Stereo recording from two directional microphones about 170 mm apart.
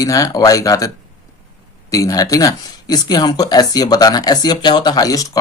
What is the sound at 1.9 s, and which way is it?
Speech, 20° left (ahead or behind).